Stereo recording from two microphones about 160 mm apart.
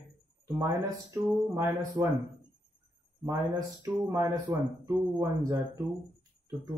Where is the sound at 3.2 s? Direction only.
20° right (ahead or behind).